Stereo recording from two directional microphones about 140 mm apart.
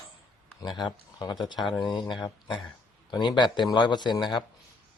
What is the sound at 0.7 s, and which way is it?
Speech, 30° left (ahead or behind).